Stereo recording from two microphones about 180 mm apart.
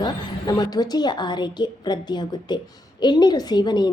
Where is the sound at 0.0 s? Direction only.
20° left (ahead or behind).